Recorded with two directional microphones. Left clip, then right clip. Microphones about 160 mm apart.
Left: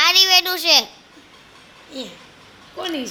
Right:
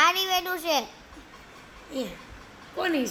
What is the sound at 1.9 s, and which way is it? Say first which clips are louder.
Speech: even; 40° right (ahead or behind).